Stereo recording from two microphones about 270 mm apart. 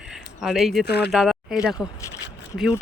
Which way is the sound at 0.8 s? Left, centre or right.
Left.